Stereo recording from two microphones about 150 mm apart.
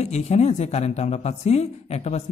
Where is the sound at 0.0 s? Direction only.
50° left (ahead or behind).